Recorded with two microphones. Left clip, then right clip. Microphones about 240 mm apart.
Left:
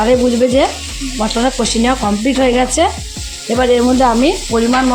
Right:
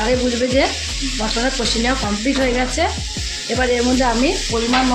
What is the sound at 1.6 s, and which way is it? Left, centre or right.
Speech, left.